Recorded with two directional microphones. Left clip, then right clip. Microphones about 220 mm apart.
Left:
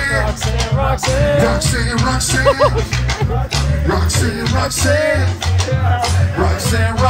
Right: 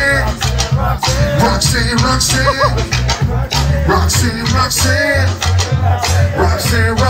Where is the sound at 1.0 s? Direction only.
10° left (ahead or behind).